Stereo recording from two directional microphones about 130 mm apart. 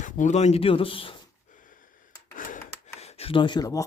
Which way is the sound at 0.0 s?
70° left (ahead or behind).